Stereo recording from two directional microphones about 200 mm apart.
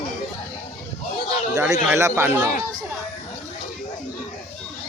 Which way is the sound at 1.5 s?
15° right (ahead or behind).